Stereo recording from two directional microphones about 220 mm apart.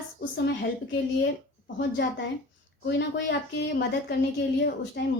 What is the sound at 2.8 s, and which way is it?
A woman's voice, 55° left (ahead or behind).